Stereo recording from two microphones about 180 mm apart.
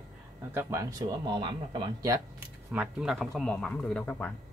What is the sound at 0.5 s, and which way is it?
Speech, 15° right (ahead or behind).